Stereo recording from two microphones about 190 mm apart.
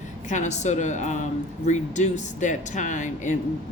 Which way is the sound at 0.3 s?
40° left (ahead or behind).